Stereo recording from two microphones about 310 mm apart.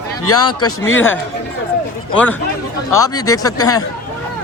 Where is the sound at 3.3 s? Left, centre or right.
Centre.